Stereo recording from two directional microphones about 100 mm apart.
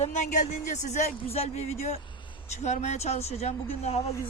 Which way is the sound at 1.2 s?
90° left.